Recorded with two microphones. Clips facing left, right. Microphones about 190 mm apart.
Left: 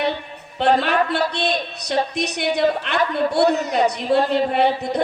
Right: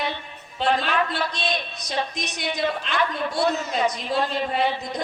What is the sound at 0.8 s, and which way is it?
A woman's voice, 65° left (ahead or behind).